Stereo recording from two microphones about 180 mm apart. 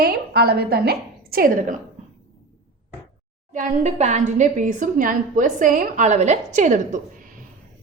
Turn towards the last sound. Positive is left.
turn(degrees=-45)  # may be behind; listen again after turning